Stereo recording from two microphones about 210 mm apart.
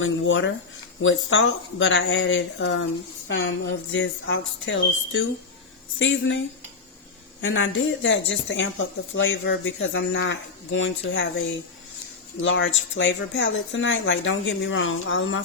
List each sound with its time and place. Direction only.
0.0 s speech: 65° left (ahead or behind)
7.4 s speech: 65° left (ahead or behind)
12.4 s speech: 65° left (ahead or behind)